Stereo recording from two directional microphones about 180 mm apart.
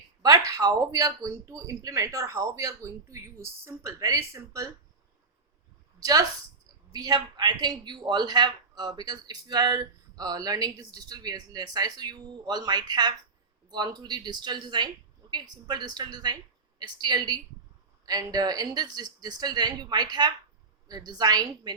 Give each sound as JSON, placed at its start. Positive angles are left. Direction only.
{"t": 0.2, "sound": "speech", "side_deg": -20}
{"t": 6.0, "sound": "a woman's voice", "side_deg": -20}